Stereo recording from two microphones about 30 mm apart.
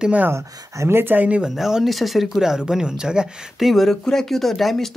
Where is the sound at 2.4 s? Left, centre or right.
Centre.